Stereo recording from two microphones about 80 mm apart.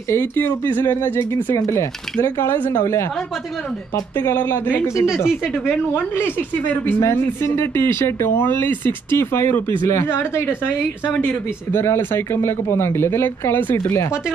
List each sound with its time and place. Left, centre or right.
0.1 s speech: left
2.2 s speech: left
4.8 s speech: left
5.1 s a woman's voice: centre
5.9 s speech: left
11.7 s speech: left